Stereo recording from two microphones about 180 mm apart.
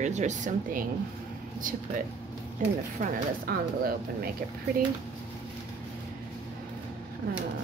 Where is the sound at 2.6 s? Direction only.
45° right (ahead or behind).